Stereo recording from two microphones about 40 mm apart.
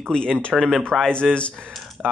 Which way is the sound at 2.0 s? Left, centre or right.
Right.